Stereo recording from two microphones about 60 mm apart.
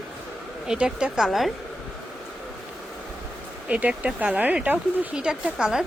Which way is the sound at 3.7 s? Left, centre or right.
Right.